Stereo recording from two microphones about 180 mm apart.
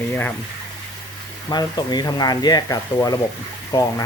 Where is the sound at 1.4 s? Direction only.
25° left (ahead or behind).